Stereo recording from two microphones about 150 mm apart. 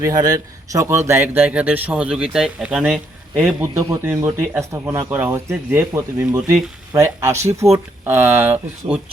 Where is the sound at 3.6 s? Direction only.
20° right (ahead or behind).